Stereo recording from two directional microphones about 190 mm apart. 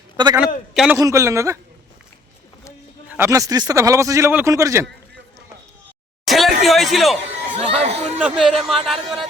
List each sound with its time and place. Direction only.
0.7 s a man's voice: centre (ahead or behind)
0.9 s speech: 15° right (ahead or behind)
3.1 s speech: 15° right (ahead or behind)
6.2 s speech: centre (ahead or behind)
7.3 s speech: 35° right (ahead or behind)
8.2 s speech: centre (ahead or behind)